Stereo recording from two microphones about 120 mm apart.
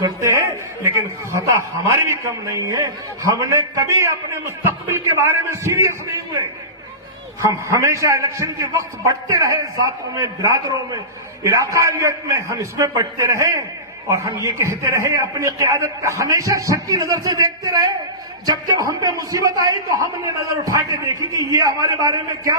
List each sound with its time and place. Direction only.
0.0 s a man's voice: 25° right (ahead or behind)
7.4 s a man's voice: 25° right (ahead or behind)